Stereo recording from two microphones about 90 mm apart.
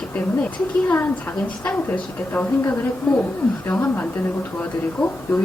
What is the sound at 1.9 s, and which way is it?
Speech, 20° left (ahead or behind).